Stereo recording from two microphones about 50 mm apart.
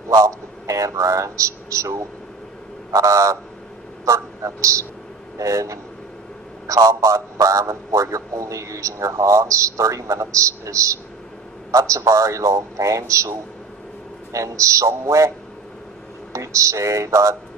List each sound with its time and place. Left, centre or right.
0.1 s a man's voice: right
16.3 s a man's voice: right